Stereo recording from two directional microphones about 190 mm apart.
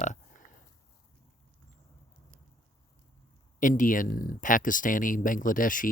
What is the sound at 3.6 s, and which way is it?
Speech, 45° left (ahead or behind).